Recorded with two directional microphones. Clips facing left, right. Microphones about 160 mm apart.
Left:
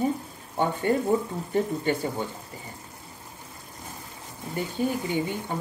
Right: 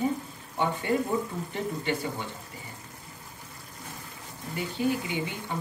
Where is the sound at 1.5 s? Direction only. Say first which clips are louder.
Left 7 dB; 45° left (ahead or behind).